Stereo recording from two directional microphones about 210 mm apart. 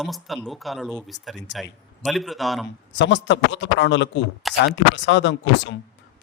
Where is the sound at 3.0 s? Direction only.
60° left (ahead or behind).